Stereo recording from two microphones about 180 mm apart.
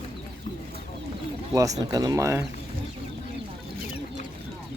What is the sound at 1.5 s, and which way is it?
Speech, 20° right (ahead or behind).